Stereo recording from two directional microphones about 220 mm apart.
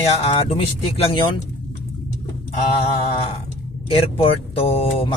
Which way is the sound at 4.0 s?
25° left (ahead or behind).